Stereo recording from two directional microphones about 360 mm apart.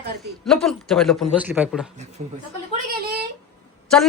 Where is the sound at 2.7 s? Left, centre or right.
Right.